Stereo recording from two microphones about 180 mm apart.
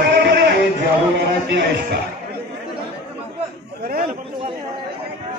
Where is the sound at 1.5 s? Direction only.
70° right (ahead or behind).